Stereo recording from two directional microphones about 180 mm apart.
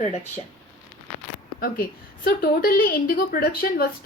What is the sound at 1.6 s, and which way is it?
Speech, 55° left (ahead or behind).